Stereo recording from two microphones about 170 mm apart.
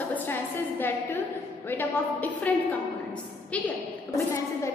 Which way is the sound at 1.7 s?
10° left (ahead or behind).